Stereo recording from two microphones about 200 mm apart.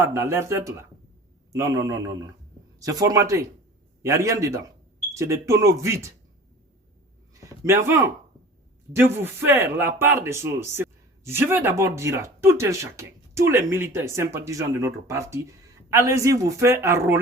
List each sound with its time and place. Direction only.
0.0 s speech: 15° right (ahead or behind)
7.4 s a man's voice: 15° right (ahead or behind)